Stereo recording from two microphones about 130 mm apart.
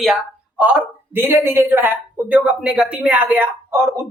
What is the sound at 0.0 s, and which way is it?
Speech, 5° right (ahead or behind).